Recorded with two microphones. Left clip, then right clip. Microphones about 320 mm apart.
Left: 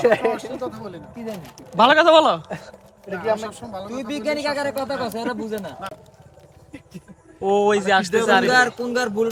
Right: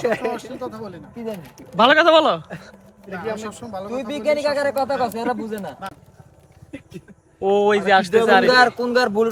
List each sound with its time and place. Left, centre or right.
0.6 s speech: centre
7.4 s speech: centre
8.4 s speech: centre